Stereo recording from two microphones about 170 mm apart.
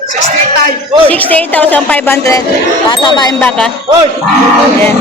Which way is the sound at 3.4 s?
5° left (ahead or behind).